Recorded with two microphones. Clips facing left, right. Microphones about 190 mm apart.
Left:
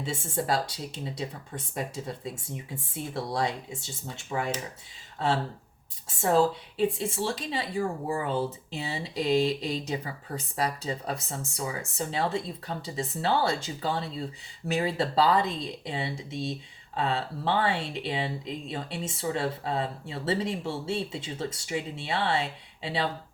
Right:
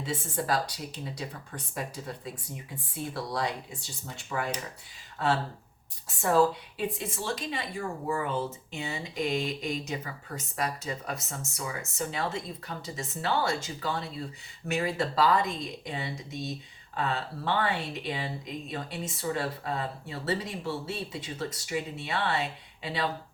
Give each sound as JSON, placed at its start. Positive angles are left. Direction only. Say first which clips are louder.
{"t": 0.0, "sound": "speech", "louder": "left 1 dB", "side_deg": 25}
{"t": 6.2, "sound": "speech", "louder": "left 1 dB", "side_deg": 25}